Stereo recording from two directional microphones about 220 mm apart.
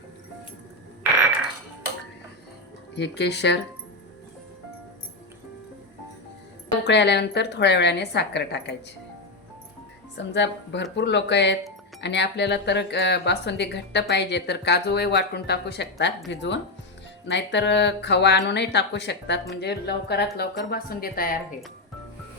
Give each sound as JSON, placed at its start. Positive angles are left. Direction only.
{"t": 2.9, "sound": "speech", "side_deg": 50}
{"t": 6.8, "sound": "speech", "side_deg": 50}
{"t": 10.2, "sound": "speech", "side_deg": 50}